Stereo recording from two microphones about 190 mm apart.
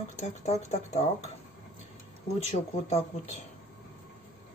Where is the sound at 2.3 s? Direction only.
35° left (ahead or behind).